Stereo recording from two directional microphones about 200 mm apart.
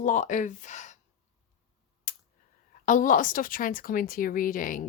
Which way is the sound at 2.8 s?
40° left (ahead or behind).